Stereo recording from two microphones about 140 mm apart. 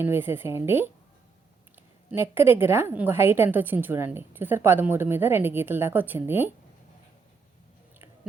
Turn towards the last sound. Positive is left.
turn(degrees=-15)  # may be behind; listen again after turning